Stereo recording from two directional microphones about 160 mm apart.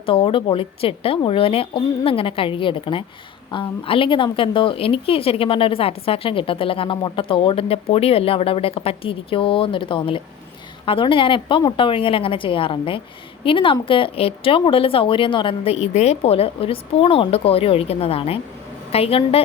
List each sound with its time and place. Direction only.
0.0 s a woman's voice: 35° left (ahead or behind)